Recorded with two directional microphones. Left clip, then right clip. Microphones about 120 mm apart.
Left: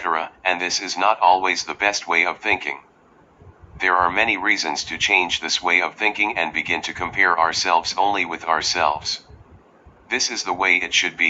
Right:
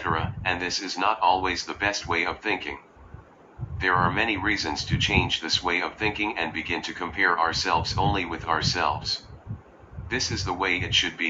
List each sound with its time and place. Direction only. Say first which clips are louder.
0.0 s speech: left 5 dB; 30° left (ahead or behind)